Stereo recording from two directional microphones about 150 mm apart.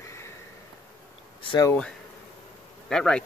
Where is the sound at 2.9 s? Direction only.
5° left (ahead or behind).